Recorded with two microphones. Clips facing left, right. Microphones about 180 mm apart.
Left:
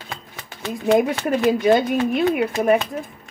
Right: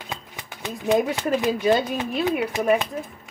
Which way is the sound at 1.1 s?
15° right (ahead or behind).